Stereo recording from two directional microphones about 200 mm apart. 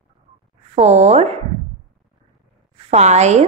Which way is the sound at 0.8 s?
35° right (ahead or behind).